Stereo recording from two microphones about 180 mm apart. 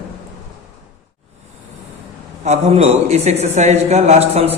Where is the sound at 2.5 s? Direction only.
35° right (ahead or behind).